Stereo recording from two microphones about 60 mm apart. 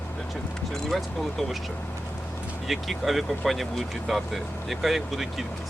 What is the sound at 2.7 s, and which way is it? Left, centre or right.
Speech, centre.